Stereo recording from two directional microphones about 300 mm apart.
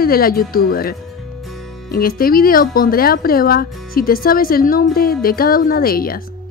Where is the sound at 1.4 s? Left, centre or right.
Centre.